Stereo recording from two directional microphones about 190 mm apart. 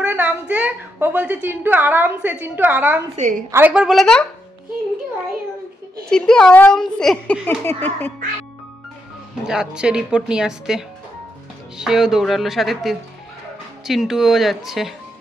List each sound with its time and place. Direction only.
0.0 s a woman's voice: 10° right (ahead or behind)
3.2 s a woman's voice: 45° right (ahead or behind)
3.5 s speech: 5° right (ahead or behind)
6.0 s speech: 5° left (ahead or behind)
9.4 s speech: 5° right (ahead or behind)
11.8 s speech: 5° right (ahead or behind)